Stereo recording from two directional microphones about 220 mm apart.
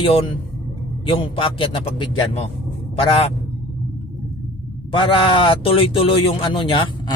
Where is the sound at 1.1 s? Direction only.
25° left (ahead or behind).